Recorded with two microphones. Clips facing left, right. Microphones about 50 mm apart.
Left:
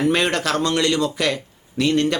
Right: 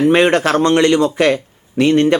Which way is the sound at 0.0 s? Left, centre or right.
Right.